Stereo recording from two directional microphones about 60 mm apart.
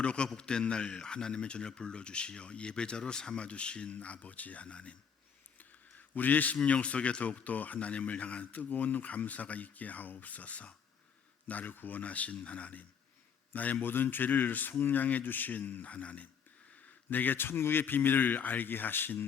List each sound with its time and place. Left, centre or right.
0.0 s speech: centre
6.1 s speech: left